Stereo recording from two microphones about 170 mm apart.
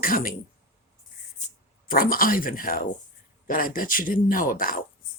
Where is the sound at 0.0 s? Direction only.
55° left (ahead or behind).